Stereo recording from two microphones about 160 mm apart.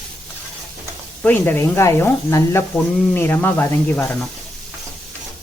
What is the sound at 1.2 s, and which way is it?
Speech, 10° left (ahead or behind).